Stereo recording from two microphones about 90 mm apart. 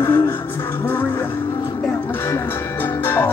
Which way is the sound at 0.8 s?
25° left (ahead or behind).